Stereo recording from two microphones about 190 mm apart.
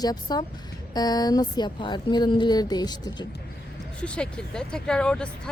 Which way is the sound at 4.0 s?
5° left (ahead or behind).